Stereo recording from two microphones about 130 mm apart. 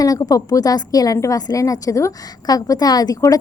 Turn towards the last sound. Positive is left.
turn(degrees=30)  # may be behind; listen again after turning